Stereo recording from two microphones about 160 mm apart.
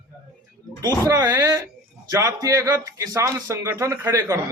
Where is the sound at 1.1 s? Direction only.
20° right (ahead or behind).